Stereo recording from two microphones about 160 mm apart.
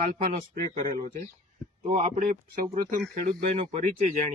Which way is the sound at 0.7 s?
55° right (ahead or behind).